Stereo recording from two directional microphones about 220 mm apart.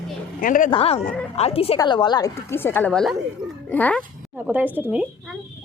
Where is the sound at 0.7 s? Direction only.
25° left (ahead or behind); by 4.0 s 5° left (ahead or behind).